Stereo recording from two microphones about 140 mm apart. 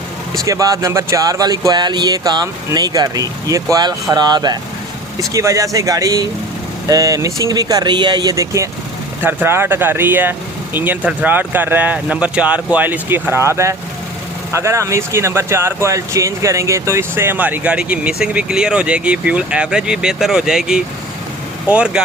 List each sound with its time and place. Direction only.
0.4 s speech: 25° right (ahead or behind); by 22.0 s 5° right (ahead or behind)